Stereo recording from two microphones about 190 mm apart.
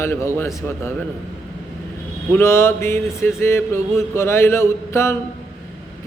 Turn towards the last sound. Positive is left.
turn(degrees=15)  # may be behind; listen again after turning